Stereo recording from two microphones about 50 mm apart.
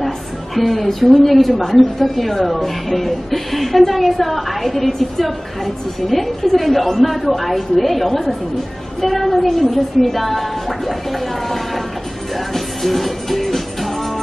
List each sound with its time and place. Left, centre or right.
0.6 s a woman's voice: centre
10.9 s a sound: centre
12.5 s music: centre